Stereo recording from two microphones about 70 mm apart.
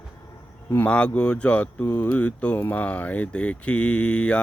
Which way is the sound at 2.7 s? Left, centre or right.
Left.